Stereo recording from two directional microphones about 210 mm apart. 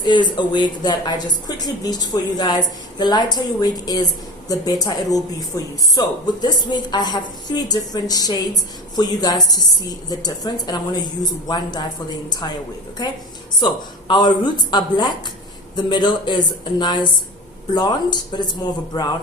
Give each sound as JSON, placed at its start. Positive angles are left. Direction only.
{"t": 0.3, "sound": "a woman's voice", "side_deg": 20}
{"t": 13.0, "sound": "a woman's voice", "side_deg": 20}